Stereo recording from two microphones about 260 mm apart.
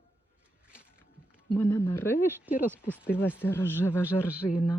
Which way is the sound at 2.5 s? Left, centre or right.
Centre.